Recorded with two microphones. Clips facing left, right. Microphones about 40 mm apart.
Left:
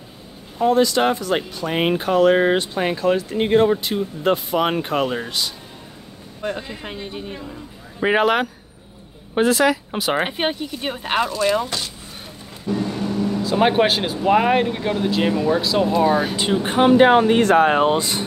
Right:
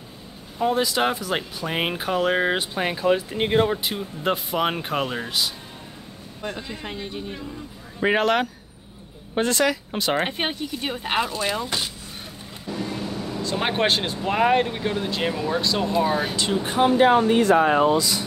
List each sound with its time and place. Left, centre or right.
0.6 s speech: centre
6.4 s speech: centre
12.8 s speech: centre
16.6 s speech: left